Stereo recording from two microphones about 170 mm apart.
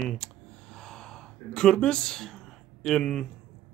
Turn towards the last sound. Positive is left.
turn(degrees=5)  # may be behind; listen again after turning